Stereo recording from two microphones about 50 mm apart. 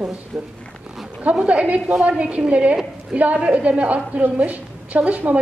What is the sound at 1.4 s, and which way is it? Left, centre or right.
A woman's voice, right.